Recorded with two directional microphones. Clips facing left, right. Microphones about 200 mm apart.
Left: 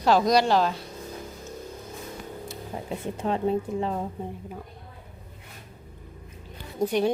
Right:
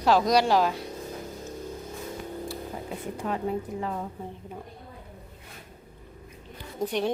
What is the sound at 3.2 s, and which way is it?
Speech, 25° left (ahead or behind).